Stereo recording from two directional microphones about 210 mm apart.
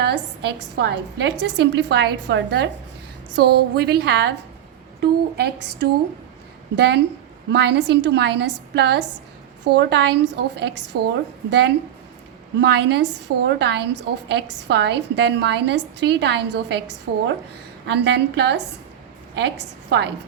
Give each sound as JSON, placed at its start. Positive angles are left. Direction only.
{"t": 0.0, "sound": "a woman's voice", "side_deg": -50}
{"t": 12.5, "sound": "a woman's voice", "side_deg": -55}